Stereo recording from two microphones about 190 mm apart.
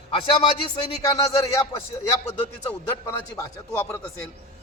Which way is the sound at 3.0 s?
10° left (ahead or behind).